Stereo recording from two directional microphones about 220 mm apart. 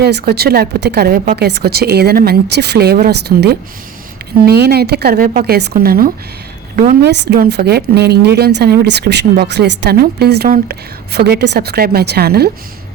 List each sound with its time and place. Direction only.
0.0 s speech: 45° right (ahead or behind)